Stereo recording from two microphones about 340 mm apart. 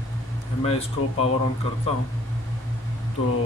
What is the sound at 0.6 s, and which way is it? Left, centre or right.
Speech, centre.